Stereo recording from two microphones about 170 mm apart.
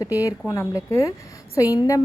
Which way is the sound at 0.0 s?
20° left (ahead or behind).